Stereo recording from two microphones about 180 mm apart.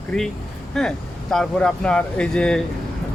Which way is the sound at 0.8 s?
Centre (ahead or behind).